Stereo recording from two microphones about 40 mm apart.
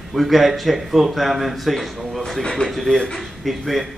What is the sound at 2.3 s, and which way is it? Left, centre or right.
Speech, centre.